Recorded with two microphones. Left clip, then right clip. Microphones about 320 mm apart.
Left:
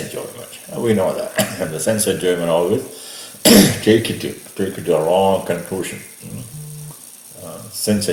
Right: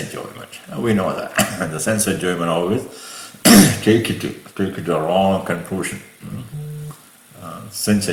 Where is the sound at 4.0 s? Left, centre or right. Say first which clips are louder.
Even; centre.